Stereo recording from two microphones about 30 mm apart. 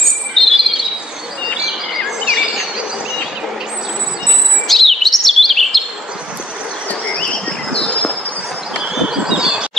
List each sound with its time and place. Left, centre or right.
0.4 s bird vocalization: centre
2.0 s a sound: centre
4.6 s chirp: centre
7.1 s bird: left
9.3 s bird: right